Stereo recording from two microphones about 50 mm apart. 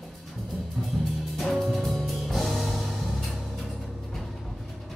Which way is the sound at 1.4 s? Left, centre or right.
Centre.